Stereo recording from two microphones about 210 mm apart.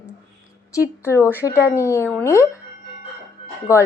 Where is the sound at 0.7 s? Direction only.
15° left (ahead or behind).